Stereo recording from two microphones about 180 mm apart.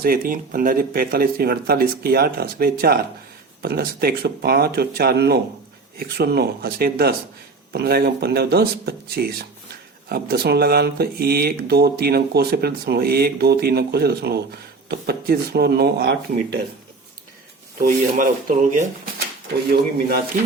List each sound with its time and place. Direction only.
0.0 s speech: 55° right (ahead or behind)
17.7 s speech: 50° right (ahead or behind)
19.7 s speech: 55° right (ahead or behind)